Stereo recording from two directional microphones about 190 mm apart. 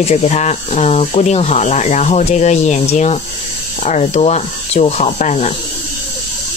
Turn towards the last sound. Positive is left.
turn(degrees=40)  # may be behind; listen again after turning